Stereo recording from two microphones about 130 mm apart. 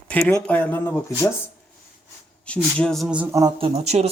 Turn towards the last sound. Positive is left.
turn(degrees=-55)  # may be behind; listen again after turning